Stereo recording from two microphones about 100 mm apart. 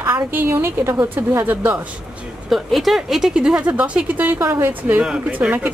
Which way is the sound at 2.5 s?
Centre (ahead or behind).